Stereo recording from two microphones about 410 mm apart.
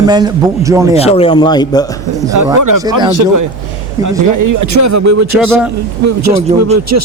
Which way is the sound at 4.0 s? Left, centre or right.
Right.